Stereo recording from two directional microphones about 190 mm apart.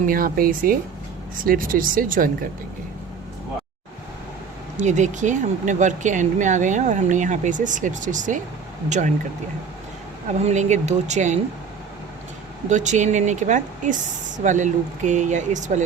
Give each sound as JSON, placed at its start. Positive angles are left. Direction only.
{"t": 0.0, "sound": "speech", "side_deg": -50}
{"t": 4.8, "sound": "speech", "side_deg": -40}
{"t": 10.3, "sound": "speech", "side_deg": -35}
{"t": 12.6, "sound": "speech", "side_deg": -40}